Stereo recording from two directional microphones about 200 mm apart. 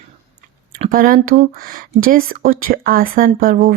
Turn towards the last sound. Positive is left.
turn(degrees=-45)  # may be behind; listen again after turning